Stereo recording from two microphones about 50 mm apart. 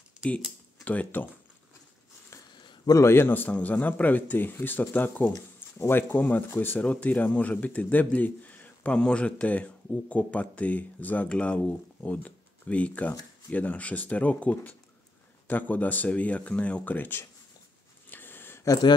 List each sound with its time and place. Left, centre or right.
0.8 s a man's voice: left
3.0 s a man's voice: left
3.3 s a man's voice: left
5.8 s speech: left
6.8 s a man's voice: left
11.2 s a man's voice: left
18.1 s a sound: left